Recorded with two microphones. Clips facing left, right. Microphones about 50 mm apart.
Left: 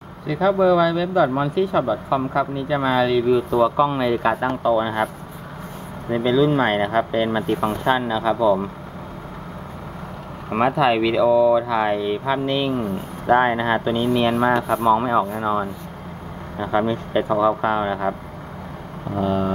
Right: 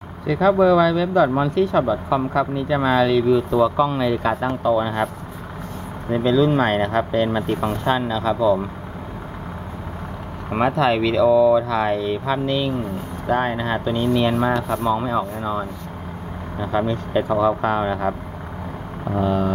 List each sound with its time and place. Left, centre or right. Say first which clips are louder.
0.3 s speech: right 2 dB; centre
10.5 s speech: left 1 dB; centre
19.1 s speech: right 1 dB; centre